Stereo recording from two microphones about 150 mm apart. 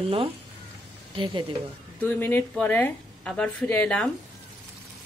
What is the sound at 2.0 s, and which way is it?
A woman's voice, 10° left (ahead or behind).